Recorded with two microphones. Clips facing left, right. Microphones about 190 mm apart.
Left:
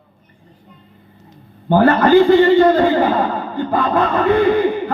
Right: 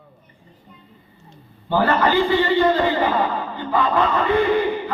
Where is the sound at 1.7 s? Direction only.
50° left (ahead or behind).